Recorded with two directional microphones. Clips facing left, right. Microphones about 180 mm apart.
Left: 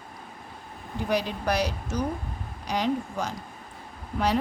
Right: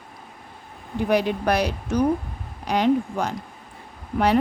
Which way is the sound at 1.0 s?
60° right (ahead or behind).